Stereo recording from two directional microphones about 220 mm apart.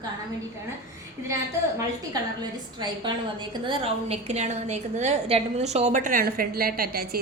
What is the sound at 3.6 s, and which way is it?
A woman's voice, 25° right (ahead or behind).